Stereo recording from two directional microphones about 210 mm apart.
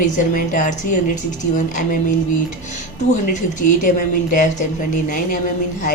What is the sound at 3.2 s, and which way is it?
A woman's voice, 35° left (ahead or behind).